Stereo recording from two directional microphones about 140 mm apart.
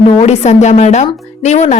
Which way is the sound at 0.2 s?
50° left (ahead or behind).